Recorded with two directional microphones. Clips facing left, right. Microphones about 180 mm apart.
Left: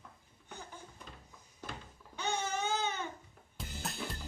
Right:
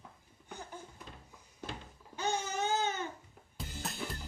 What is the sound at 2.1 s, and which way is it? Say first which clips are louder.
Baby cry: right 1 dB; 40° right (ahead or behind).